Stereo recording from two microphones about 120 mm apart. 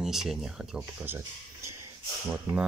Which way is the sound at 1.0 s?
20° right (ahead or behind).